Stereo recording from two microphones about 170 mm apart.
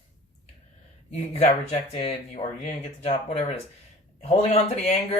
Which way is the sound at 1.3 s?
40° left (ahead or behind).